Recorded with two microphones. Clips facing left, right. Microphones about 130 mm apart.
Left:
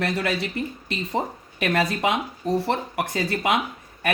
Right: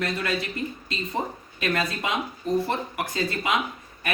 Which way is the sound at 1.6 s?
65° left (ahead or behind).